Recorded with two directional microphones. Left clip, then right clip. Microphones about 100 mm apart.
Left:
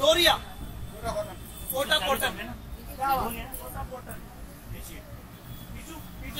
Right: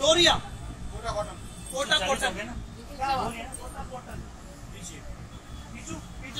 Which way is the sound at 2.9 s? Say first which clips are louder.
Left 1 dB; 15° left (ahead or behind).